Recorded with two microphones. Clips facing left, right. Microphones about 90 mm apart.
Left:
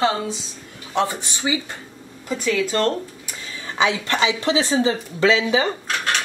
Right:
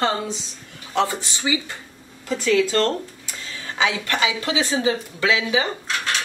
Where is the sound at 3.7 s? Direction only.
20° left (ahead or behind).